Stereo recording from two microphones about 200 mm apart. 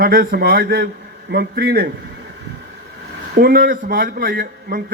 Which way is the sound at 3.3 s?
50° right (ahead or behind).